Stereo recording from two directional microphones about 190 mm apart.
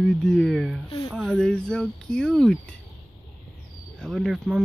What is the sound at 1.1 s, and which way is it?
Speech, 5° left (ahead or behind).